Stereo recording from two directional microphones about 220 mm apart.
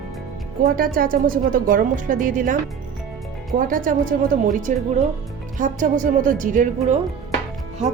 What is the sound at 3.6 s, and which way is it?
Speech, 40° right (ahead or behind).